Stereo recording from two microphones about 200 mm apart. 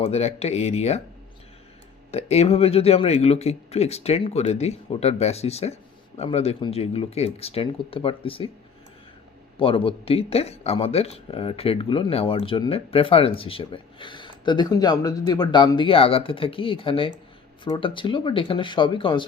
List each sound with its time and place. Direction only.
0.0 s speech: 30° left (ahead or behind)
2.0 s speech: 30° left (ahead or behind)
9.6 s speech: 25° left (ahead or behind)